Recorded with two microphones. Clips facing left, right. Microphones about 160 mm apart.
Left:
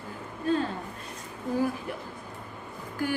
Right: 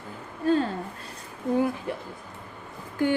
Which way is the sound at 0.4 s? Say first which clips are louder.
Right 4 dB; 35° right (ahead or behind).